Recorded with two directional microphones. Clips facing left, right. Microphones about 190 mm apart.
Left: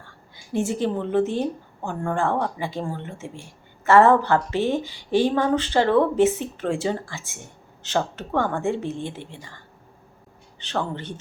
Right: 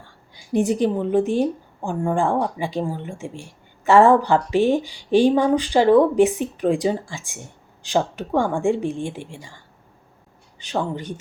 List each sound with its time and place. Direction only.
0.5 s a woman's voice: 20° right (ahead or behind)
10.6 s a woman's voice: 10° right (ahead or behind)